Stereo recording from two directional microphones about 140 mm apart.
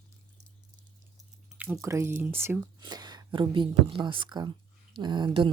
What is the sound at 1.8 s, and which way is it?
Speech, 20° right (ahead or behind).